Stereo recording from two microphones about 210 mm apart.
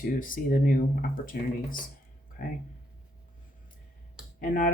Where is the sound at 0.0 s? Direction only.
40° left (ahead or behind).